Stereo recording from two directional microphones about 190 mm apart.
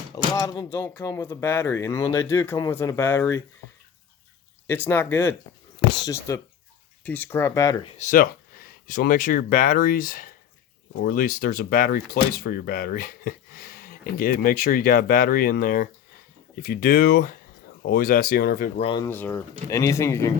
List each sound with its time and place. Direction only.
0.3 s speech: 20° left (ahead or behind)
4.6 s speech: 10° left (ahead or behind)
8.0 s speech: 45° left (ahead or behind)
18.8 s speech: 25° left (ahead or behind)
19.0 s speech: 10° left (ahead or behind)